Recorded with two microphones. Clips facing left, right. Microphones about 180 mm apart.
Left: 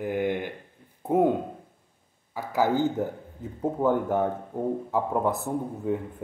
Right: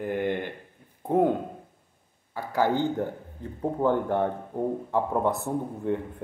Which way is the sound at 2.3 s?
5° left (ahead or behind).